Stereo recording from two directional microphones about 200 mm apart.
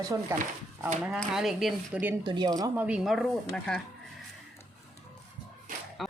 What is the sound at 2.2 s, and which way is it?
Speech, 20° right (ahead or behind).